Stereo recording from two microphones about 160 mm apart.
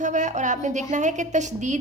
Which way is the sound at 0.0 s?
50° right (ahead or behind).